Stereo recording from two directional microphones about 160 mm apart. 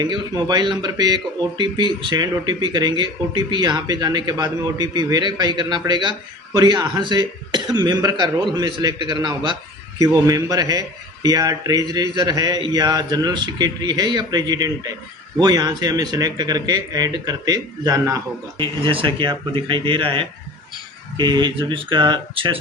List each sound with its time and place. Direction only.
0.0 s speech: 25° right (ahead or behind)